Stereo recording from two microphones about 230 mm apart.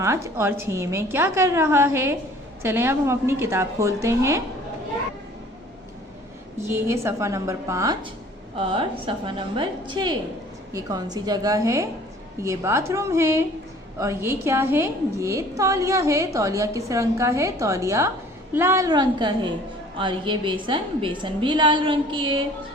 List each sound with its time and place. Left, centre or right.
0.0 s a woman's voice: centre
6.6 s a woman's voice: centre